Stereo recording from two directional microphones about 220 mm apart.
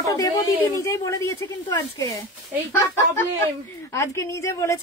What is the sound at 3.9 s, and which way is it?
Speech, 10° left (ahead or behind).